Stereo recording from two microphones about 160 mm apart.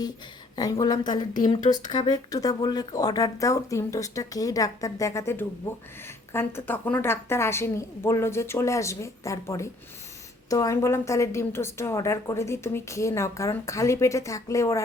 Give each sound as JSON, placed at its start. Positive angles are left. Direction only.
{"t": 0.5, "sound": "a woman's voice", "side_deg": 25}